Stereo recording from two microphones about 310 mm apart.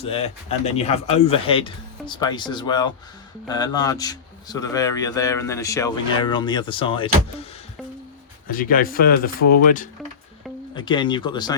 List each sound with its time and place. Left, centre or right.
0.0 s speech: centre
8.5 s speech: left
10.8 s speech: centre